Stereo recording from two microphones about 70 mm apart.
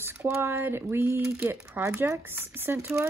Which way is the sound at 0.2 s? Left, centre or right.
Right.